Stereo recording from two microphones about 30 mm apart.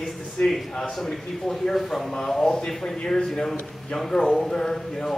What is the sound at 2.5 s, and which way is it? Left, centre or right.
A man's voice, left.